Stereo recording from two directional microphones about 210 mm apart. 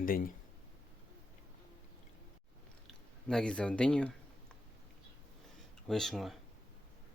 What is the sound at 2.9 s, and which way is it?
Speech, 5° left (ahead or behind).